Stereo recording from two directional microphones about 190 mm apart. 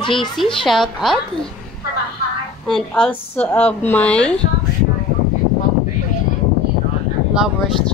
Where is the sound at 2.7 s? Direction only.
5° left (ahead or behind).